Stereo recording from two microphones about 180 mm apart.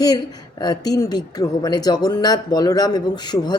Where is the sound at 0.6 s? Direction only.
20° left (ahead or behind).